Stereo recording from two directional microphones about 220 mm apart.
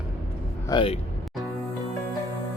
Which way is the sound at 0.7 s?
25° left (ahead or behind).